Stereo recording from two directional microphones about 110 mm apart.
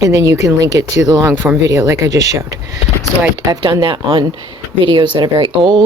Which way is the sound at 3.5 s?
35° right (ahead or behind).